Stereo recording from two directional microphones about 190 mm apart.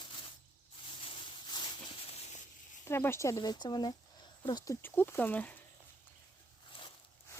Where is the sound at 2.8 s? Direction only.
15° left (ahead or behind).